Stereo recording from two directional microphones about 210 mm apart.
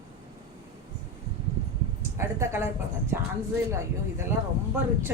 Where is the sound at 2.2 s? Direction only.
10° right (ahead or behind).